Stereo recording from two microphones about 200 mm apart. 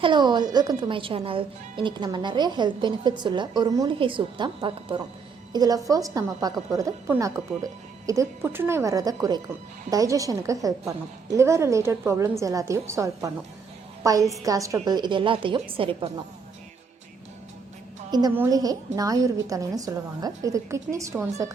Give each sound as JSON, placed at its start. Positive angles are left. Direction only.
{"t": 0.0, "sound": "a woman's voice", "side_deg": -25}
{"t": 18.1, "sound": "a woman's voice", "side_deg": -20}